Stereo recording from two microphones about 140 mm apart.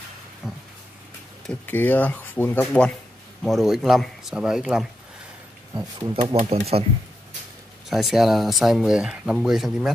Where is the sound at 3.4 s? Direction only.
Centre (ahead or behind).